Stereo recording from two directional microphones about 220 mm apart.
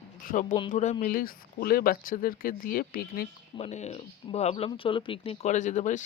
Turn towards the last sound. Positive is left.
turn(degrees=35)  # may be behind; listen again after turning